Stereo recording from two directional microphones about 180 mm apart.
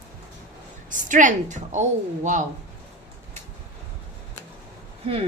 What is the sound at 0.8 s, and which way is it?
A woman's voice, 45° right (ahead or behind).